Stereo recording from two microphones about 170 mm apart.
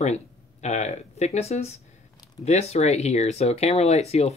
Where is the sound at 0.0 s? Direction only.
40° left (ahead or behind).